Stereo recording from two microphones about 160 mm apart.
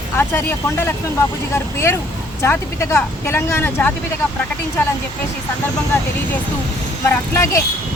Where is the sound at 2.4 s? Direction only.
15° left (ahead or behind).